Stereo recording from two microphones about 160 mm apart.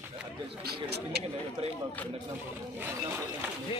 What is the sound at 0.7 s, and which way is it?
Speech, 90° right.